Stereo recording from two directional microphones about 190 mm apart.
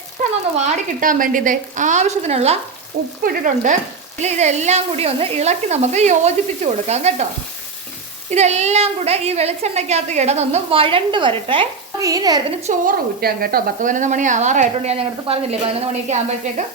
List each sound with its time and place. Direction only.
0.5 s a woman's voice: 40° right (ahead or behind)
3.2 s frying: 45° right (ahead or behind)
4.2 s a woman's voice: 35° right (ahead or behind)
8.3 s a woman's voice: 35° right (ahead or behind); by 12.5 s 20° right (ahead or behind)
12.6 s a woman's voice: 50° right (ahead or behind); by 16.1 s 30° right (ahead or behind)